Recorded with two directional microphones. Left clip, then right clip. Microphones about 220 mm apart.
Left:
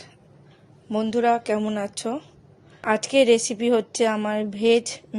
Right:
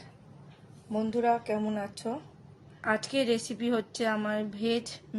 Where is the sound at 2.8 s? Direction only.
30° left (ahead or behind).